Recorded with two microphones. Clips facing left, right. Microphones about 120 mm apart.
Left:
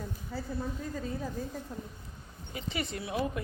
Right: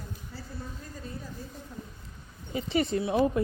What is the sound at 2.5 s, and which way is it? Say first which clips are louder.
Speech: right 9 dB; 30° right (ahead or behind).